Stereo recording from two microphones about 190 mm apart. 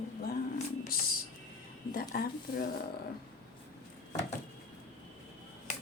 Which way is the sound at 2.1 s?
55° left (ahead or behind).